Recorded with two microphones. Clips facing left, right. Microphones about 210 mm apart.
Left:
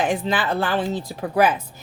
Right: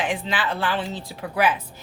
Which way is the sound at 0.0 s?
45° left (ahead or behind).